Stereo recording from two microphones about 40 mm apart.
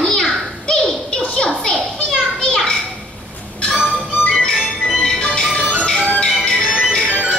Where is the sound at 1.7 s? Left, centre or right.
Centre.